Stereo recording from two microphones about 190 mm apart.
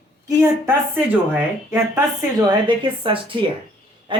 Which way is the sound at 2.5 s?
25° right (ahead or behind).